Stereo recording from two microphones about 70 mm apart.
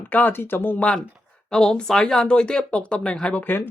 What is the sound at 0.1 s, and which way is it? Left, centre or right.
Speech, left.